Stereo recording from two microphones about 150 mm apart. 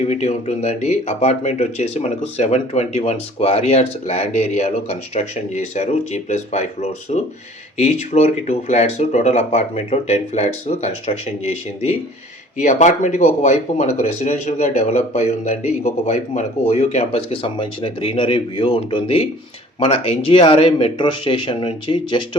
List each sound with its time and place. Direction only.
0.0 s speech: 45° left (ahead or behind)
12.5 s speech: 55° left (ahead or behind); by 22.4 s 35° left (ahead or behind)